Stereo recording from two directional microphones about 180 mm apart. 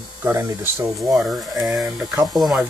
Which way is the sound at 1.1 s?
Centre (ahead or behind).